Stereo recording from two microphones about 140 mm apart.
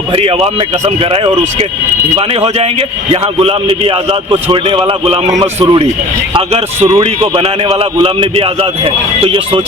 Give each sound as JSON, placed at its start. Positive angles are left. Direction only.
{"t": 0.1, "sound": "speech", "side_deg": -40}
{"t": 6.9, "sound": "speech", "side_deg": -40}